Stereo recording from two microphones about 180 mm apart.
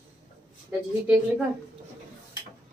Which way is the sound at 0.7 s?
5° right (ahead or behind).